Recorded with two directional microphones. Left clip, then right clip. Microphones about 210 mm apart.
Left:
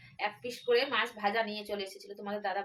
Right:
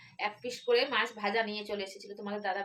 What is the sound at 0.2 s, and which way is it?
A woman's voice, 10° right (ahead or behind).